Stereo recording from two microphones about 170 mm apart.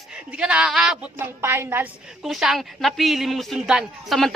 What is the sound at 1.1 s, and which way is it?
Speech, 15° right (ahead or behind).